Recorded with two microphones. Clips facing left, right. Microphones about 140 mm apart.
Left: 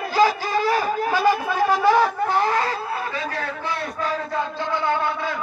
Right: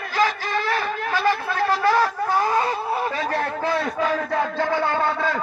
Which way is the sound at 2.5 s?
20° right (ahead or behind).